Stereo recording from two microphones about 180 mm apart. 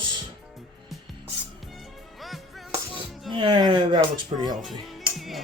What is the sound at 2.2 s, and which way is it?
Music, centre (ahead or behind).